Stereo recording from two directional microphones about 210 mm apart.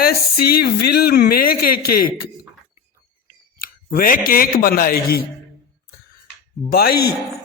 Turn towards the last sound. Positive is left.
turn(degrees=45)  # may be behind; listen again after turning